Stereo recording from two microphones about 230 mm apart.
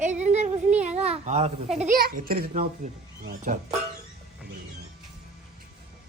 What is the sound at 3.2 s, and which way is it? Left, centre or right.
Speech, right.